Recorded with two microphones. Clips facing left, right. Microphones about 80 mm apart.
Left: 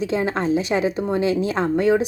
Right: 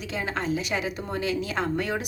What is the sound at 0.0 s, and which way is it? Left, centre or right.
A woman's voice, left.